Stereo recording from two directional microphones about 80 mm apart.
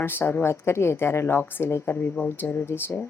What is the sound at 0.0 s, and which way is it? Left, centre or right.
A woman's voice, left.